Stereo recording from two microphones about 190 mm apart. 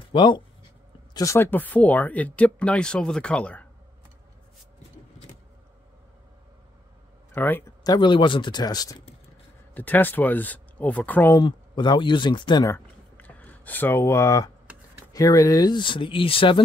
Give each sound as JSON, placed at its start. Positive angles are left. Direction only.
{"t": 0.1, "sound": "speech", "side_deg": 25}
{"t": 7.3, "sound": "speech", "side_deg": 10}
{"t": 9.8, "sound": "speech", "side_deg": 10}
{"t": 11.4, "sound": "speech", "side_deg": 25}
{"t": 12.7, "sound": "a sound", "side_deg": 10}
{"t": 15.1, "sound": "speech", "side_deg": 20}